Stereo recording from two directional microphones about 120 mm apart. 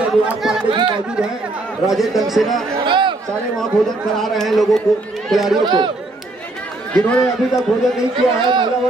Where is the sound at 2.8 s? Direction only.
40° right (ahead or behind).